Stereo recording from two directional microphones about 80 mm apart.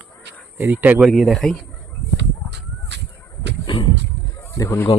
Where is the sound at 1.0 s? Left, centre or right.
Centre.